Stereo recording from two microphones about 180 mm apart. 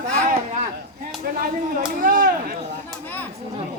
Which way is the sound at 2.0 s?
50° right (ahead or behind).